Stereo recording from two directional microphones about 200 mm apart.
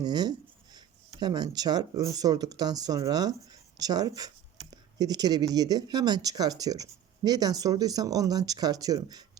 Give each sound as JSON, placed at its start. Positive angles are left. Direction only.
{"t": 0.0, "sound": "speech", "side_deg": -20}